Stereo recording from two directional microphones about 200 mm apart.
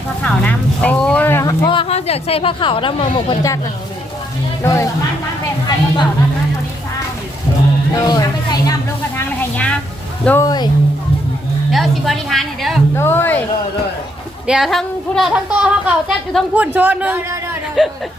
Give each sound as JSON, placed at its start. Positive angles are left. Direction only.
{"t": 0.2, "sound": "speech", "side_deg": 5}
{"t": 1.6, "sound": "speech", "side_deg": 25}
{"t": 4.6, "sound": "speech", "side_deg": 15}
{"t": 7.9, "sound": "speech", "side_deg": 20}
{"t": 9.1, "sound": "a sound", "side_deg": 10}
{"t": 10.2, "sound": "speech", "side_deg": 15}
{"t": 11.7, "sound": "a sound", "side_deg": 0}
{"t": 13.0, "sound": "speech", "side_deg": 10}
{"t": 14.4, "sound": "a woman's voice", "side_deg": 0}